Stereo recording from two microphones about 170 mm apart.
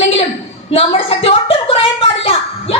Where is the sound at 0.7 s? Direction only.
30° left (ahead or behind).